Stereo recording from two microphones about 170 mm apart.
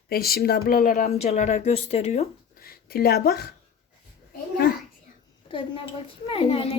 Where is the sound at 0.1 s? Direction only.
65° left (ahead or behind).